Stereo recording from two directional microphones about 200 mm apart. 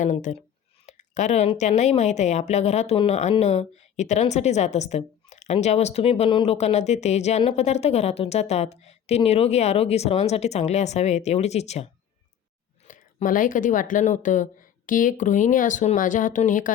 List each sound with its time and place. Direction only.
0.0 s a woman's voice: 40° left (ahead or behind)
0.9 s a sound: 40° left (ahead or behind)
1.5 s a woman's voice: 35° left (ahead or behind)
12.9 s a woman's voice: 40° left (ahead or behind)